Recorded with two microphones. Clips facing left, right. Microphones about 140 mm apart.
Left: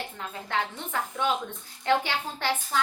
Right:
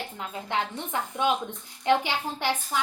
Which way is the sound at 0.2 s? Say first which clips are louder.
Right 1 dB; 20° right (ahead or behind).